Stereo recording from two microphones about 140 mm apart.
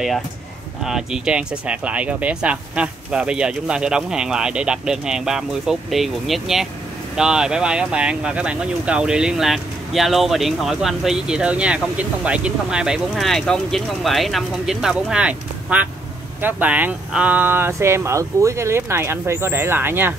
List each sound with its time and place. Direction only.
0.8 s speech: 5° right (ahead or behind)